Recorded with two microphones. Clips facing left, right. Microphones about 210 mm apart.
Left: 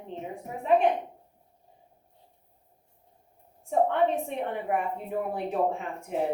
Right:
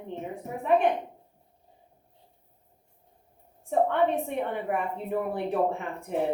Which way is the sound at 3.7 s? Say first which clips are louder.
Even; 60° right (ahead or behind).